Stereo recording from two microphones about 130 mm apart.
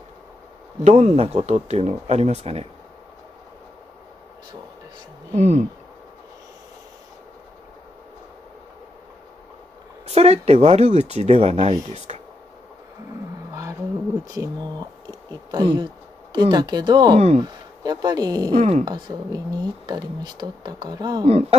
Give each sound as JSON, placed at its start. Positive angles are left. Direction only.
{"t": 0.8, "sound": "speech", "side_deg": -55}
{"t": 5.3, "sound": "speech", "side_deg": -60}
{"t": 10.0, "sound": "speech", "side_deg": -55}
{"t": 12.1, "sound": "a sound", "side_deg": -55}
{"t": 14.2, "sound": "speech", "side_deg": -30}
{"t": 18.6, "sound": "speech", "side_deg": -60}
{"t": 18.9, "sound": "speech", "side_deg": -35}
{"t": 21.3, "sound": "speech", "side_deg": -50}